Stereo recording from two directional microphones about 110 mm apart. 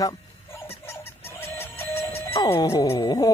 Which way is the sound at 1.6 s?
20° left (ahead or behind).